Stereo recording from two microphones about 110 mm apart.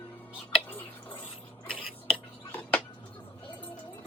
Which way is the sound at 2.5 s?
15° left (ahead or behind).